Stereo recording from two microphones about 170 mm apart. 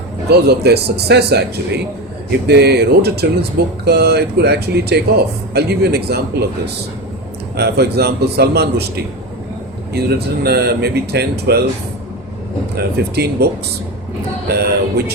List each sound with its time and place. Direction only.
0.3 s speech: 70° right (ahead or behind)
7.5 s speech: 75° right (ahead or behind)
9.9 s speech: 70° right (ahead or behind)
12.7 s speech: 70° right (ahead or behind)